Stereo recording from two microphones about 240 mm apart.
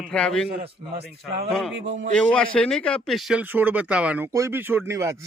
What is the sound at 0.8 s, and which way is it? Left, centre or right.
Speech, right.